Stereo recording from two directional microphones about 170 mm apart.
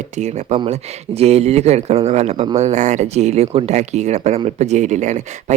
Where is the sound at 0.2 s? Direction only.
40° right (ahead or behind).